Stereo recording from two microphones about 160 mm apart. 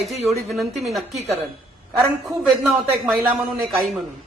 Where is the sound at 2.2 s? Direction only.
Centre (ahead or behind).